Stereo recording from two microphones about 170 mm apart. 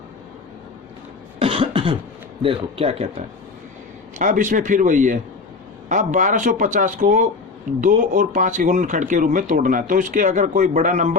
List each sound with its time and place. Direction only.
1.4 s cough: 30° right (ahead or behind)
2.4 s speech: 30° right (ahead or behind)
4.2 s speech: 50° right (ahead or behind)